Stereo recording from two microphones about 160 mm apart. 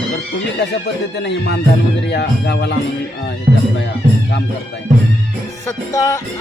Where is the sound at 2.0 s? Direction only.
90° left.